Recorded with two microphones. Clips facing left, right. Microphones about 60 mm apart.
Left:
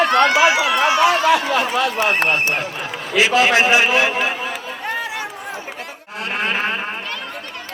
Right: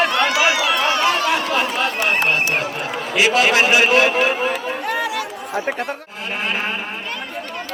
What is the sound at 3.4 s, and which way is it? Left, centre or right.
Speech, left.